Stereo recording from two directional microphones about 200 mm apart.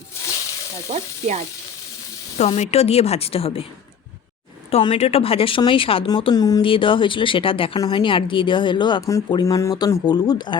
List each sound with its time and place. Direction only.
0.9 s ratchet: 35° right (ahead or behind)
2.4 s speech: 35° left (ahead or behind)
4.7 s speech: 25° left (ahead or behind)